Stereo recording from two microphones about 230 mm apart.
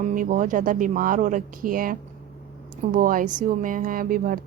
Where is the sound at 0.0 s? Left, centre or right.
Right.